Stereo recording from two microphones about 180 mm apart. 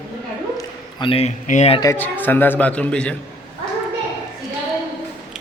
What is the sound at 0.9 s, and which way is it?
Speech, 30° left (ahead or behind).